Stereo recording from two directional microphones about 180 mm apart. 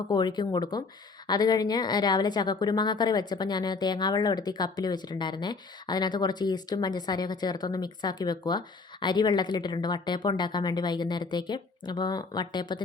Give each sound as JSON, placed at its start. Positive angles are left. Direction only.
{"t": 0.1, "sound": "a woman's voice", "side_deg": 25}